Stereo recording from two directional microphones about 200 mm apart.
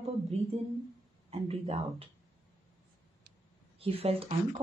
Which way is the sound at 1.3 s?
30° right (ahead or behind).